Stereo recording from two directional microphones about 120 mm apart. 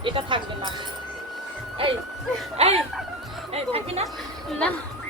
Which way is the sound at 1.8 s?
50° right (ahead or behind).